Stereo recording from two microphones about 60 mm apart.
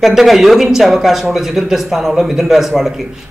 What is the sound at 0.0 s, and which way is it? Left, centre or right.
Speech, centre.